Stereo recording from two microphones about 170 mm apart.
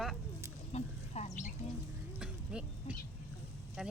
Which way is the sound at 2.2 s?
5° right (ahead or behind).